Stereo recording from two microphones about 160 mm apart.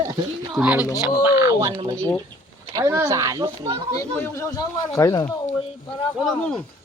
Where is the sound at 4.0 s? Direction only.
15° left (ahead or behind).